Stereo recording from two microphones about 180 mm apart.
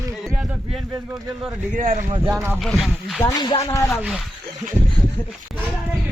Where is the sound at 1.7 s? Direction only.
50° right (ahead or behind).